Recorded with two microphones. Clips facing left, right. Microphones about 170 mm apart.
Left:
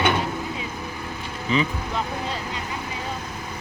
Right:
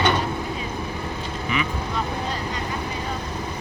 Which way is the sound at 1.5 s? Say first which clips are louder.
Left 4 dB; 30° left (ahead or behind).